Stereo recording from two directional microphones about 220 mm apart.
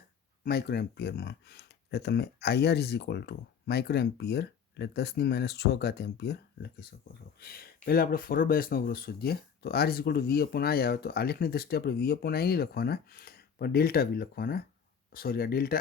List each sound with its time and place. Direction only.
0.4 s speech: 45° left (ahead or behind)